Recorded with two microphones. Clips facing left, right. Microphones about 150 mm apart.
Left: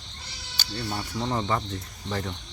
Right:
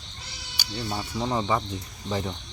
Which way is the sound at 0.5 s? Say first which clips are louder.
Right 1 dB; 10° right (ahead or behind).